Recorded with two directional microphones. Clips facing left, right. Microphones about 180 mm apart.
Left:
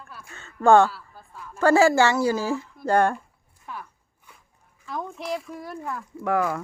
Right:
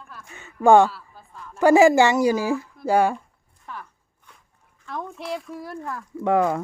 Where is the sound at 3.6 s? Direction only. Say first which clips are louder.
Even; 5° left (ahead or behind).